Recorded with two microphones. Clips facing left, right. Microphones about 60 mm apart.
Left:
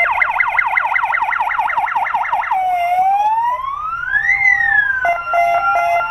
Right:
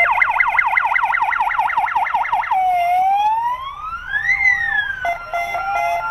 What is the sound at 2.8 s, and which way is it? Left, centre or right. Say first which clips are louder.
Emergency vehicle: left 1 dB; left.